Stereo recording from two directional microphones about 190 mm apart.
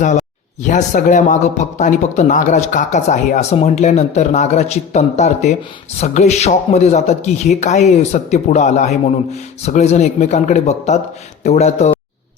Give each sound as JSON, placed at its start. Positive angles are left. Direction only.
{"t": 0.0, "sound": "speech", "side_deg": 40}